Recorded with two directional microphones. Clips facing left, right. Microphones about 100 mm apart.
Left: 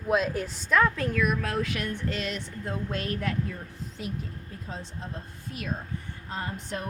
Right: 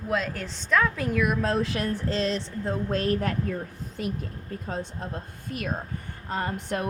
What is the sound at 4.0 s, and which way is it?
A woman's voice, 55° right (ahead or behind).